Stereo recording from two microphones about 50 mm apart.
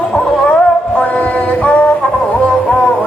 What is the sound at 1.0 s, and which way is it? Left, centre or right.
Music, left.